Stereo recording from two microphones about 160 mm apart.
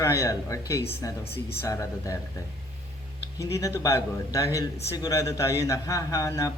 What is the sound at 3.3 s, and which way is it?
A man's voice, 20° left (ahead or behind).